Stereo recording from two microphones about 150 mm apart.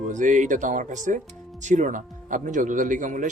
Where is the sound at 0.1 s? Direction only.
55° right (ahead or behind).